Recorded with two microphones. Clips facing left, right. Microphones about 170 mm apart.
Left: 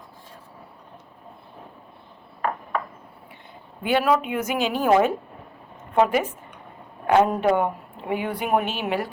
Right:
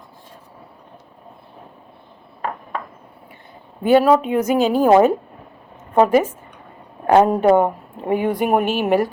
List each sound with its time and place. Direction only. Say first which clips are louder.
3.8 s a woman's voice: right 7 dB; 40° right (ahead or behind)